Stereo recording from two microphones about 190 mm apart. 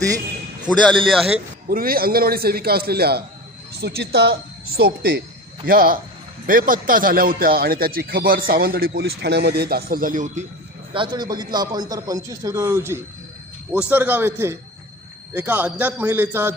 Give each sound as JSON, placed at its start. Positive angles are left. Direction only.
{"t": 0.7, "sound": "a man's voice", "side_deg": 5}
{"t": 1.7, "sound": "a man's voice", "side_deg": -50}
{"t": 10.9, "sound": "a man's voice", "side_deg": -25}